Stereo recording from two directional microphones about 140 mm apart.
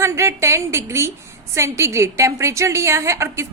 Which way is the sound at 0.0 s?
20° right (ahead or behind).